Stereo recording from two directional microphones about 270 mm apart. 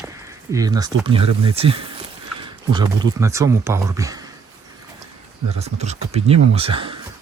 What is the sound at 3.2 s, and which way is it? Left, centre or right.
Speech, centre.